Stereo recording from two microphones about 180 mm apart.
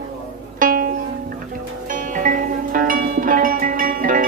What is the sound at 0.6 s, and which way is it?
Music, 50° right (ahead or behind).